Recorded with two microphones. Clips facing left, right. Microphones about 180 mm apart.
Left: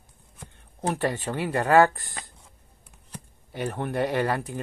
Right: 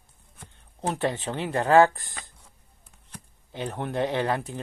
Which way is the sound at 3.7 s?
15° right (ahead or behind).